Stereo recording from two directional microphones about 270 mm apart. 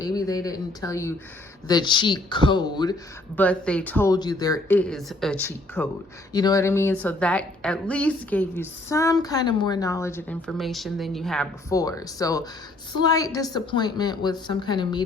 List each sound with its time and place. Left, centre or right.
0.0 s speech: centre
3.3 s a woman's voice: centre
11.7 s speech: centre